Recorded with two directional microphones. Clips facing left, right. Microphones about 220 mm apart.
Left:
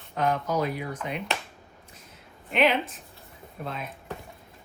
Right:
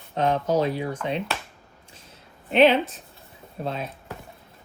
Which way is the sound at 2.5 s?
30° right (ahead or behind).